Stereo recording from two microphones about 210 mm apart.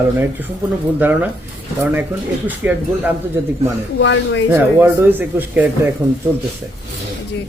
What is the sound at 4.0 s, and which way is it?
Speech, 60° left (ahead or behind).